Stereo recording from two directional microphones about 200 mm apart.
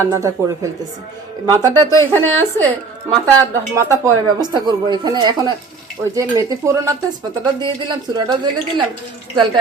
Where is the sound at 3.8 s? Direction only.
15° right (ahead or behind).